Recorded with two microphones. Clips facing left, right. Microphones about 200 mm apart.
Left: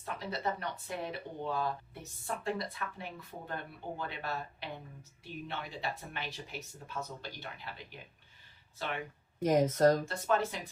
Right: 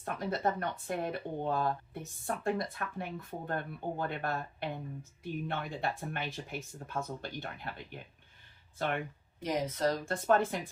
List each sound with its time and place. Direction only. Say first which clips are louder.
0.0 s speech: right 4 dB; 50° right (ahead or behind)
9.4 s speech: left 6 dB; 45° left (ahead or behind)
10.1 s speech: right 3 dB; 50° right (ahead or behind)